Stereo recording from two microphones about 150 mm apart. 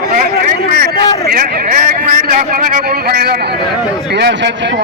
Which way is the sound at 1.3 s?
70° right (ahead or behind).